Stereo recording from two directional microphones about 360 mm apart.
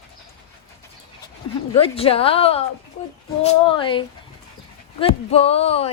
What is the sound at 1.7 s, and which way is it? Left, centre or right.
Speech, centre.